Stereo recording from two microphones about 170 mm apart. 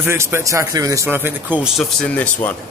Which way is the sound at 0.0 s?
15° right (ahead or behind).